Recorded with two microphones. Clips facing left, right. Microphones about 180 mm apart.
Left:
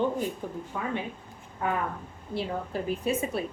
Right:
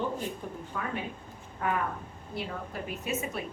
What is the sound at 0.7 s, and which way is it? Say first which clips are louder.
Speech: left 2 dB; 20° left (ahead or behind).